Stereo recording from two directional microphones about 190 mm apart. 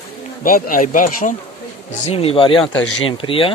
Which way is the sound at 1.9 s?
35° left (ahead or behind).